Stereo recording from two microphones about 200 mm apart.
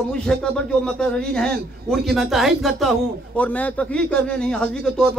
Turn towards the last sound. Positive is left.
turn(degrees=5)  # may be behind; listen again after turning